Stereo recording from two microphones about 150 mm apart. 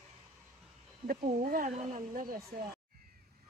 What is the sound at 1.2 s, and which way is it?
Speech, 65° right (ahead or behind).